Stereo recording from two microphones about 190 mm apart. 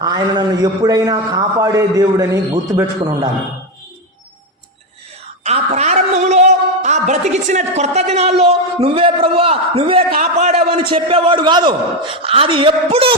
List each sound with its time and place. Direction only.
0.0 s a man's voice: 20° right (ahead or behind)
5.4 s speech: 35° right (ahead or behind)
10.1 s a man's voice: 40° right (ahead or behind)